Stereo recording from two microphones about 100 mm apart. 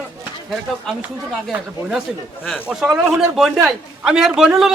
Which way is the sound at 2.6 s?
10° right (ahead or behind).